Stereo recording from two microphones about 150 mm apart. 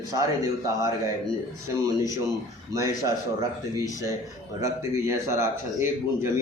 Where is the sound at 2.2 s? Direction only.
20° right (ahead or behind).